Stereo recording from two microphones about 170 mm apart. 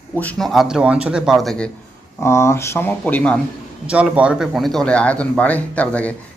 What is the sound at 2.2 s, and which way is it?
Speech, 15° left (ahead or behind).